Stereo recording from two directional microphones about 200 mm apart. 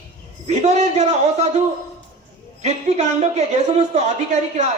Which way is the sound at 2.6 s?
35° right (ahead or behind).